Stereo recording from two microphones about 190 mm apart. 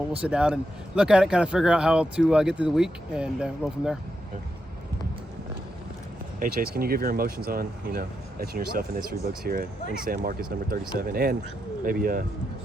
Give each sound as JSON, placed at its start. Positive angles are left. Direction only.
{"t": 0.2, "sound": "speech", "side_deg": -5}
{"t": 6.4, "sound": "speech", "side_deg": -50}